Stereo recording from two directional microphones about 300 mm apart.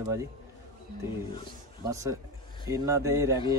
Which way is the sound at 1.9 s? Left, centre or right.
Centre.